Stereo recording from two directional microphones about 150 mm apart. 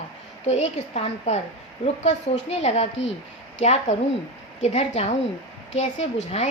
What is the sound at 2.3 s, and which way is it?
A woman's voice, 50° left (ahead or behind).